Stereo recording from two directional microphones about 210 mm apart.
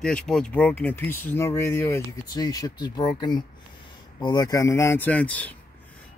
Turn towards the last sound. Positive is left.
turn(degrees=5)  # may be behind; listen again after turning